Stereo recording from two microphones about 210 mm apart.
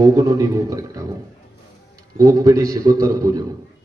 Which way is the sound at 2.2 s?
15° right (ahead or behind).